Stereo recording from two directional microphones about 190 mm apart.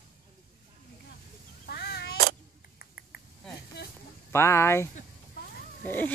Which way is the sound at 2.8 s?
55° left (ahead or behind).